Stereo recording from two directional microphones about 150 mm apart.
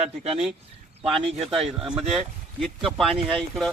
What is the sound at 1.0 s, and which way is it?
Speech, 40° right (ahead or behind).